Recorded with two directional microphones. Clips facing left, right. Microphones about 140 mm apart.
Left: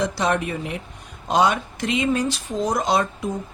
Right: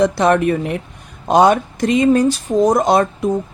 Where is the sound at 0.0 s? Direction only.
55° right (ahead or behind).